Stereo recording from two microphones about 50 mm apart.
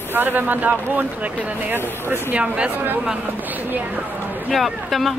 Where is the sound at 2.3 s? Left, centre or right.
Right.